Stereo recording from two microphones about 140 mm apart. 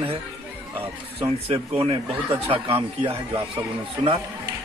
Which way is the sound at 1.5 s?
40° right (ahead or behind).